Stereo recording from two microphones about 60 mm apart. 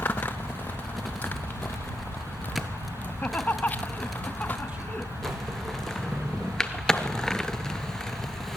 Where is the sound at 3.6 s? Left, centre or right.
Left.